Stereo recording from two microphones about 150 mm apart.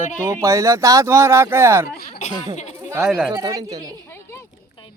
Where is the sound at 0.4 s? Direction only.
20° right (ahead or behind).